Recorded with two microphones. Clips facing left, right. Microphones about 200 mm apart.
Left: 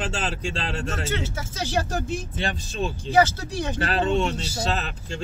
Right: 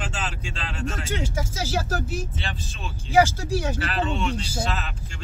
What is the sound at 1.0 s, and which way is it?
Speech, 10° right (ahead or behind).